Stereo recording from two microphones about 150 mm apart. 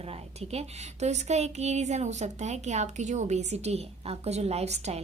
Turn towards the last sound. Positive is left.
turn(degrees=-45)  # may be behind; listen again after turning